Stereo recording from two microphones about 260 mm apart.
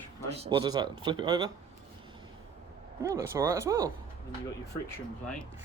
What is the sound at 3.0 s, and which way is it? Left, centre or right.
Speech, centre.